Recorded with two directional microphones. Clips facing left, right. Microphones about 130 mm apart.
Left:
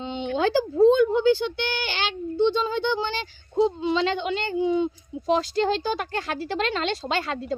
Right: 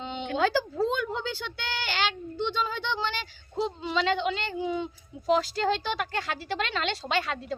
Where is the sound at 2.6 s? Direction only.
25° left (ahead or behind).